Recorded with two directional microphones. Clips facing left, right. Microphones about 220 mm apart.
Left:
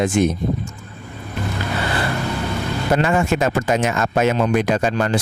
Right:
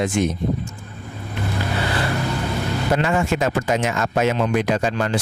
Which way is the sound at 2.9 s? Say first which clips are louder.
Left 3 dB; 50° left (ahead or behind).